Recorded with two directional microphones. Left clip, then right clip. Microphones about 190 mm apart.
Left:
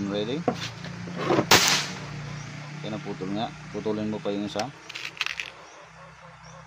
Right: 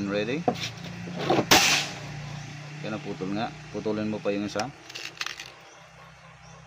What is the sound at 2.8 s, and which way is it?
Speech, 20° right (ahead or behind).